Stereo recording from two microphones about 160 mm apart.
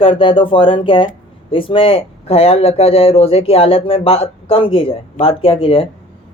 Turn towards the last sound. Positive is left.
turn(degrees=35)  # may be behind; listen again after turning